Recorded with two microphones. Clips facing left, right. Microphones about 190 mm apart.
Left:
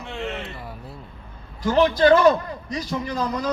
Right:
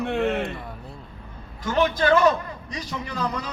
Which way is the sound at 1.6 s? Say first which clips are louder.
Left 5 dB; 35° left (ahead or behind).